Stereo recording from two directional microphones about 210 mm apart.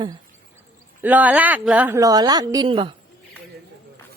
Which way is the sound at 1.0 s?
10° right (ahead or behind).